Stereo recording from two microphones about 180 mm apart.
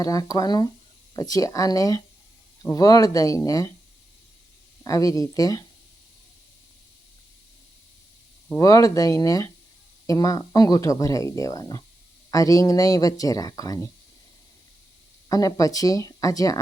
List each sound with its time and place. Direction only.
0.0 s speech: 20° left (ahead or behind)
4.8 s speech: 20° left (ahead or behind)
8.5 s speech: 20° left (ahead or behind)
15.3 s speech: 20° left (ahead or behind)